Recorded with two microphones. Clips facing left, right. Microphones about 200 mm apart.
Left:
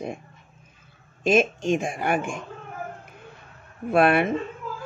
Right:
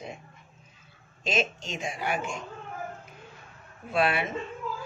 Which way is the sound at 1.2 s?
55° left (ahead or behind).